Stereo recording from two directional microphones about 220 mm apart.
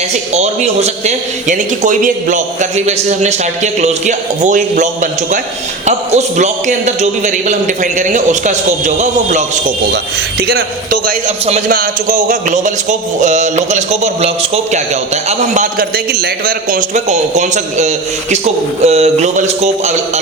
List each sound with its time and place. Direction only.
0.3 s a man's voice: 30° right (ahead or behind)